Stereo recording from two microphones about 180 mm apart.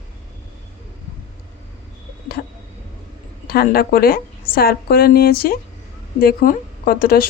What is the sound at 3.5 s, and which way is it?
Speech, 55° left (ahead or behind).